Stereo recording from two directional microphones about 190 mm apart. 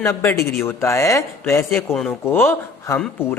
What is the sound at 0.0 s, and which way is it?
A man's voice, 15° left (ahead or behind).